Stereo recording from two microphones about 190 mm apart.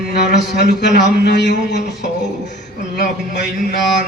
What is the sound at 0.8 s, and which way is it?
A man's voice, 60° left (ahead or behind).